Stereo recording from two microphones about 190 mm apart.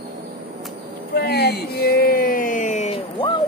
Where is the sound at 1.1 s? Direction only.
55° left (ahead or behind).